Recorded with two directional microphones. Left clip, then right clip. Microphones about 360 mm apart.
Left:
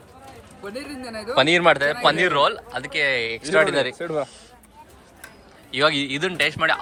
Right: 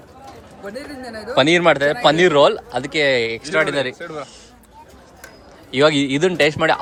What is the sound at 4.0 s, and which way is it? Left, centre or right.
Speech, centre.